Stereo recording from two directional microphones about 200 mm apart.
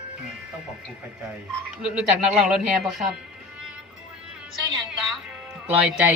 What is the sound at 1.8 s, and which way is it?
Speech, 5° right (ahead or behind).